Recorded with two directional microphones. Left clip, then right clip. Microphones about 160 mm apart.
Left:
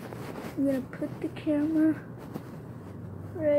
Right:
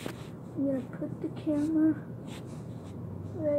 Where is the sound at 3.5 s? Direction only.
25° left (ahead or behind).